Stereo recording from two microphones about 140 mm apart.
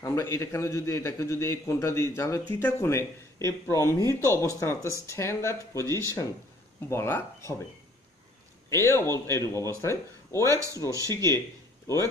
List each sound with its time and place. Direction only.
0.0 s a man's voice: 20° left (ahead or behind)
8.6 s a man's voice: 20° left (ahead or behind)
10.9 s speech: 25° right (ahead or behind)